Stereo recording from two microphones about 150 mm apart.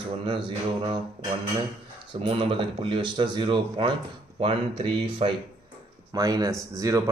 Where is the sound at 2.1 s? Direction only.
40° right (ahead or behind).